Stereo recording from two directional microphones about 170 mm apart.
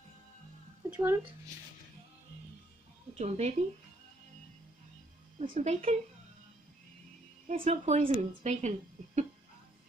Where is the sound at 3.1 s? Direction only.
40° right (ahead or behind).